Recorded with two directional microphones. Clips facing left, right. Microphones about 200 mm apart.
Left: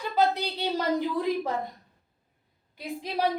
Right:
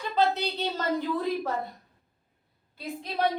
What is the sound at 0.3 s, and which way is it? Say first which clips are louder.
Speech: left 1 dB; 10° left (ahead or behind).